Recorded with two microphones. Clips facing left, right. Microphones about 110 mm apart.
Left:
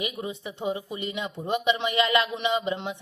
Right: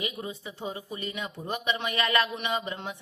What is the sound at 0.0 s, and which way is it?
Speech, 20° left (ahead or behind).